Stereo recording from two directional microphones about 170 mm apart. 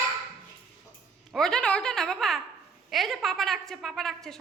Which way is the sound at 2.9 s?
Centre (ahead or behind).